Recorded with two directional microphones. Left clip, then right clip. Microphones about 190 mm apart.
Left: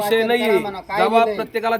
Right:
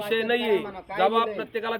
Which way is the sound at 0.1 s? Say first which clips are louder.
Left 5 dB; 75° left (ahead or behind).